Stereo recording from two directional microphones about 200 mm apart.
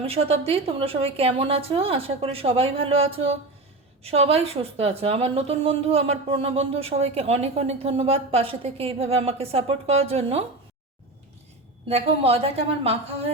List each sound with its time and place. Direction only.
0.0 s a woman's voice: 30° right (ahead or behind)
11.9 s a woman's voice: 30° right (ahead or behind)